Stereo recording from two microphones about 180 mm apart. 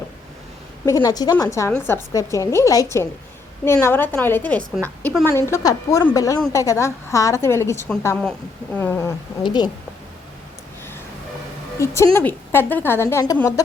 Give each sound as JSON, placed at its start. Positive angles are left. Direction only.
{"t": 0.9, "sound": "a woman's voice", "side_deg": 20}
{"t": 9.4, "sound": "a woman's voice", "side_deg": 25}
{"t": 11.8, "sound": "a woman's voice", "side_deg": 15}